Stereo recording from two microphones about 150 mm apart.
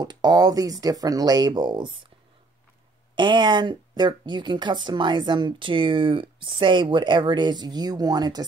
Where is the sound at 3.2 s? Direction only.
30° right (ahead or behind).